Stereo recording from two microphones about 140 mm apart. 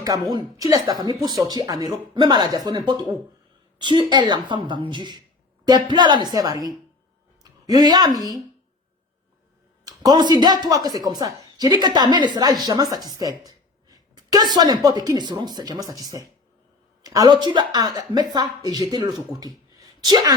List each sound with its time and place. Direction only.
0.0 s a woman's voice: 25° right (ahead or behind)
9.8 s a woman's voice: 25° right (ahead or behind)
19.8 s a sound: 30° right (ahead or behind)